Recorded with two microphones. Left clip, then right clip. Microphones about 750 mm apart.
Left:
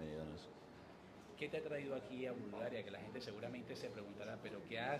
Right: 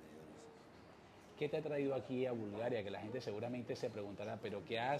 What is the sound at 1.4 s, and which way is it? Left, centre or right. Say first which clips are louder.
A man's voice: right 5 dB; right.